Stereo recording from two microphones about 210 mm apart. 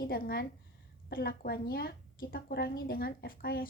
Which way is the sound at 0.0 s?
45° left (ahead or behind).